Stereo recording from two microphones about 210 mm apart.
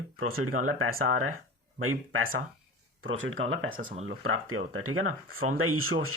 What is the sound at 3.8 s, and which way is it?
Speech, 40° right (ahead or behind).